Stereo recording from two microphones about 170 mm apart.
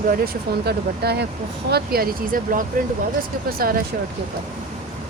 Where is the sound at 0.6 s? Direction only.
70° right (ahead or behind).